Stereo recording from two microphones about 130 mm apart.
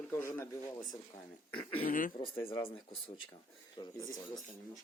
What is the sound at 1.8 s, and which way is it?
Speech, 90° left.